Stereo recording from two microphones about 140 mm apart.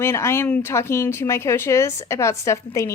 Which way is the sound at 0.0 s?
20° left (ahead or behind).